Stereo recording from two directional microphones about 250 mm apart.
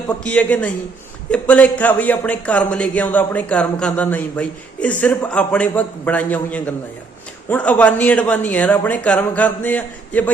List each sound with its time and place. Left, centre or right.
0.3 s a man's voice: centre